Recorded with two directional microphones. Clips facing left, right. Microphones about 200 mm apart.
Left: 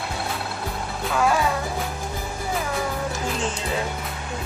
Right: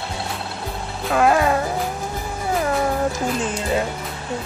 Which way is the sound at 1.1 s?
60° right (ahead or behind).